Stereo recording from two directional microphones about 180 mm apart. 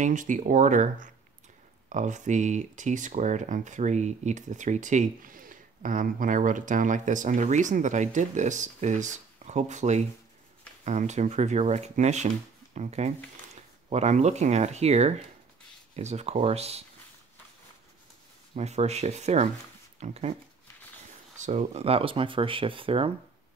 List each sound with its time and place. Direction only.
0.0 s speech: 45° right (ahead or behind)
18.5 s speech: 35° right (ahead or behind)
21.4 s speech: 40° right (ahead or behind)